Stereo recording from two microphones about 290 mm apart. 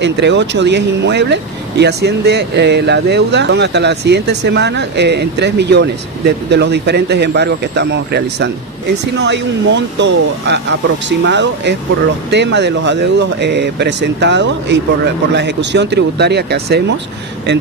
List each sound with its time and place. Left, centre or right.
0.0 s speech: right